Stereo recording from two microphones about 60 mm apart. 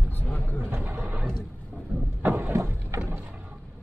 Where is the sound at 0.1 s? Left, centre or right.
Left.